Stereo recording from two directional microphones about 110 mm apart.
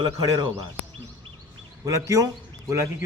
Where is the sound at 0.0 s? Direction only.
35° right (ahead or behind).